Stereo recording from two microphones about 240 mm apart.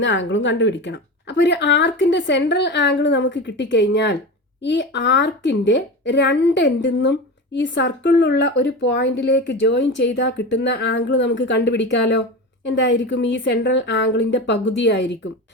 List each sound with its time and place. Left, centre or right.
0.0 s speech: left